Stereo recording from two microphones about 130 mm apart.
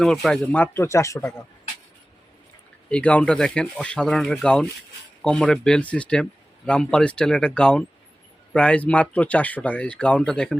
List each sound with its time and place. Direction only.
0.0 s speech: 5° left (ahead or behind); by 1.5 s 25° left (ahead or behind)
2.9 s speech: 10° left (ahead or behind)